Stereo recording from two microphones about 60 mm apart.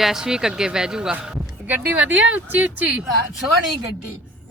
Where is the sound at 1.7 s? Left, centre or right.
Right.